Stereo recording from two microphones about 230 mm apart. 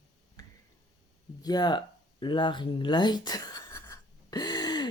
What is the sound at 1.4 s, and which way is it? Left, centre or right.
Speech, centre.